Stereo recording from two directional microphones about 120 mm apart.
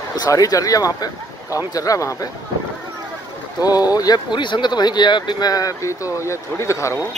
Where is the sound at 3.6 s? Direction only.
30° left (ahead or behind).